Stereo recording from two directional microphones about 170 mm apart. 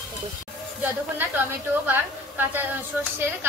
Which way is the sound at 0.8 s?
10° right (ahead or behind).